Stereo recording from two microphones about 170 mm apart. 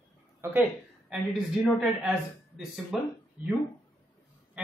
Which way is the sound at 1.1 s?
5° right (ahead or behind).